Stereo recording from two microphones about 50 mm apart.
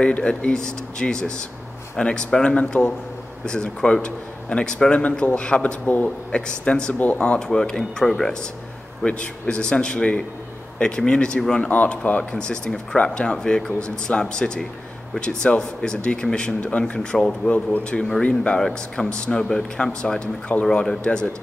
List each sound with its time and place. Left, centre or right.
0.0 s speech: left
6.9 s speech: left
7.2 s speech: centre
9.0 s speech: left
21.0 s speech: centre